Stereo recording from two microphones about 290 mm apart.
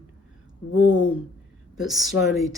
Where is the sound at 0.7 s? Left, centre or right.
Left.